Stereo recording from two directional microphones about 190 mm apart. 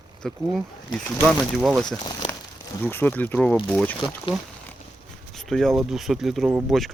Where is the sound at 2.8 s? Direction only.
10° left (ahead or behind).